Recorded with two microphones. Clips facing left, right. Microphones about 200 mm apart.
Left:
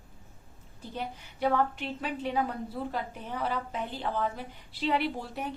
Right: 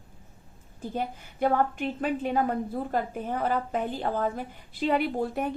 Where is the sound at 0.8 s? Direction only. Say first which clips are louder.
Right 6 dB; 50° right (ahead or behind).